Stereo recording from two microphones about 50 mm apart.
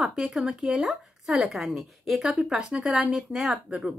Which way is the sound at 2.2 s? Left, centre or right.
Centre.